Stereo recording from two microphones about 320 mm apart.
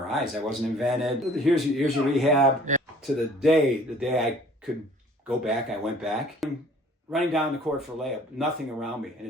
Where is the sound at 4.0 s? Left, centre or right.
Centre.